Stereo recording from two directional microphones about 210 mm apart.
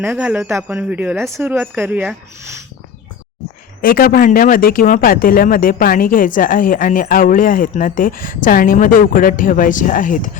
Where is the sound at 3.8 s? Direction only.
45° left (ahead or behind).